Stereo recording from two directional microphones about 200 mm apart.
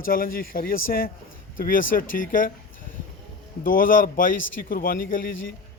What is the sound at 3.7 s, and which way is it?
Speech, 45° left (ahead or behind).